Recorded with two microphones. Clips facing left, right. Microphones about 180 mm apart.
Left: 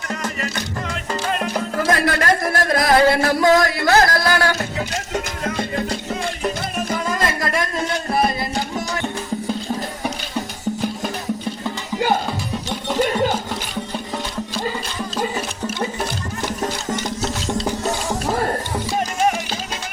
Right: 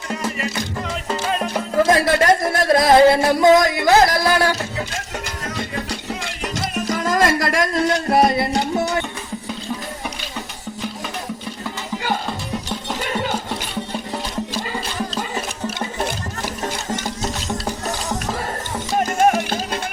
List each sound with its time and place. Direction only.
0.1 s music: 5° right (ahead or behind)
1.7 s music: 25° right (ahead or behind)
5.9 s music: 90° right; by 8.6 s 70° right (ahead or behind)
19.2 s music: 55° right (ahead or behind)